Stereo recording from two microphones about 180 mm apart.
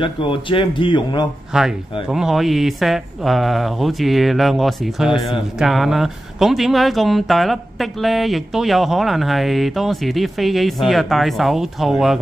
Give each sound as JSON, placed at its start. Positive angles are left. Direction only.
{"t": 0.0, "sound": "speech", "side_deg": 30}
{"t": 1.5, "sound": "speech", "side_deg": -5}